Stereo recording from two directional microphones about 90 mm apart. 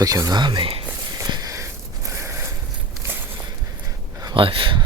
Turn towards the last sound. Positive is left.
turn(degrees=-75)  # may be behind; listen again after turning